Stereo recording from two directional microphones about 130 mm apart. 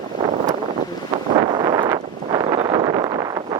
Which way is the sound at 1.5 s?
35° right (ahead or behind).